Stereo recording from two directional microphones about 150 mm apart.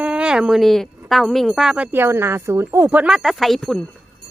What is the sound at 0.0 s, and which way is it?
Speech, 5° right (ahead or behind).